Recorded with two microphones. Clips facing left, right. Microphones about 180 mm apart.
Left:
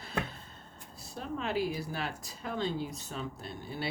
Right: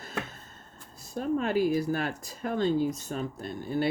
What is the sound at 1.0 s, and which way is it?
Speech, 45° right (ahead or behind).